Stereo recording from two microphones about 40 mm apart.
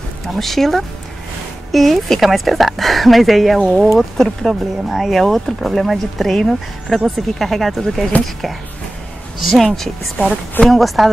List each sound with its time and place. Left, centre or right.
0.4 s speech: centre
8.1 s speech: left
9.5 s speech: centre
10.2 s a woman's voice: left
10.7 s speech: centre